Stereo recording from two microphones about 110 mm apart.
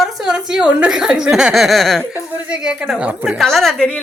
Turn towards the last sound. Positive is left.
turn(degrees=0)  # may be behind; listen again after turning